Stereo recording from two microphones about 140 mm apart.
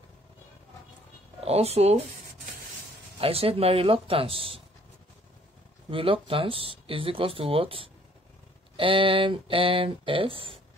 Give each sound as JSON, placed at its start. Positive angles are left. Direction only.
{"t": 1.4, "sound": "speech", "side_deg": -50}
{"t": 3.2, "sound": "speech", "side_deg": -45}
{"t": 5.9, "sound": "speech", "side_deg": -40}